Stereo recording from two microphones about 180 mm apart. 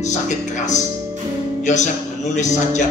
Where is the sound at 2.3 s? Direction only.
40° left (ahead or behind).